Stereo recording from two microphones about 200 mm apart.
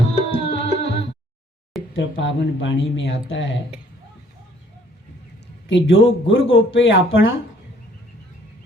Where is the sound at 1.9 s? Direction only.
70° left (ahead or behind).